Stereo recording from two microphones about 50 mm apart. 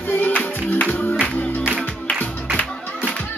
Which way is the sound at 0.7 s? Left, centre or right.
Left.